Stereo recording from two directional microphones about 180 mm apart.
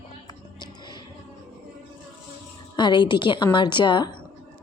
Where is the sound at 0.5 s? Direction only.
25° left (ahead or behind).